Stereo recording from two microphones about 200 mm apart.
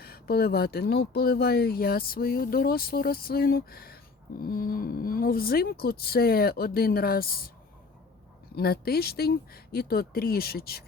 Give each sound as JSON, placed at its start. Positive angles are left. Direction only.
{"t": 0.0, "sound": "speech", "side_deg": 50}
{"t": 8.5, "sound": "speech", "side_deg": 50}